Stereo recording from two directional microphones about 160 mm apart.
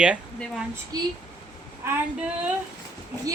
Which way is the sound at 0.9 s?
25° right (ahead or behind).